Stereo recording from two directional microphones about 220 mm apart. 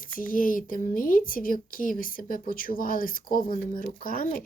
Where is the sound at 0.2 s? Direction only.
40° left (ahead or behind).